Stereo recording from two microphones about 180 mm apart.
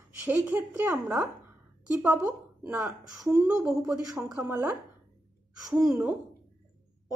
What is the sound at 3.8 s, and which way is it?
Speech, 20° right (ahead or behind).